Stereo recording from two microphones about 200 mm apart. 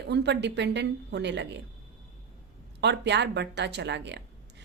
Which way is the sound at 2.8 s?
60° right (ahead or behind).